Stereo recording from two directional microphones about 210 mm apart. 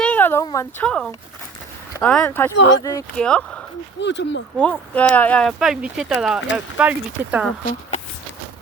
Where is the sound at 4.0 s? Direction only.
55° left (ahead or behind).